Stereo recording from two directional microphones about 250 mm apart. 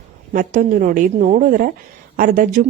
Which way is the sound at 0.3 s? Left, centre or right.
Right.